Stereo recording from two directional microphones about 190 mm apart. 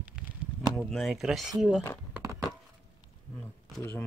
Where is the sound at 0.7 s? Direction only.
Centre (ahead or behind).